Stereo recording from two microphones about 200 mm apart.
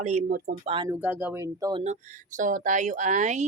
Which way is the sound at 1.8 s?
35° right (ahead or behind).